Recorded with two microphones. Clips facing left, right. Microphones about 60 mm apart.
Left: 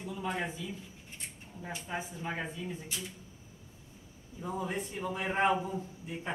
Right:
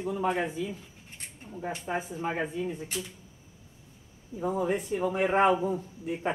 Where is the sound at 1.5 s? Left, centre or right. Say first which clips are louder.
Right 7 dB; right.